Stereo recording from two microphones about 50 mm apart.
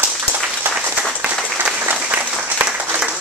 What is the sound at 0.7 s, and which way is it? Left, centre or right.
Applause, right.